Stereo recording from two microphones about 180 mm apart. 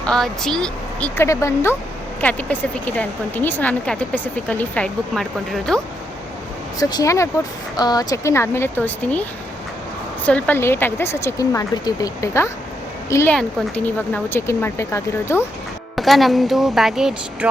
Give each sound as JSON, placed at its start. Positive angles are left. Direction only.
{"t": 0.0, "sound": "speech", "side_deg": 5}
{"t": 6.7, "sound": "speech", "side_deg": 20}
{"t": 10.2, "sound": "a woman's voice", "side_deg": 10}
{"t": 16.0, "sound": "speech", "side_deg": 0}